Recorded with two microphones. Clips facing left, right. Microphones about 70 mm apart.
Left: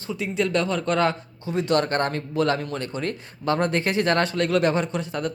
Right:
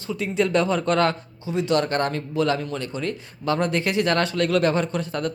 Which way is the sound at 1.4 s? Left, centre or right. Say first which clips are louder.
Even; left.